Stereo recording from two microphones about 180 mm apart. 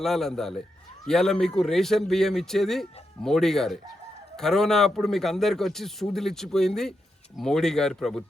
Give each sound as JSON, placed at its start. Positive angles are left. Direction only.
{"t": 0.0, "sound": "speech", "side_deg": 0}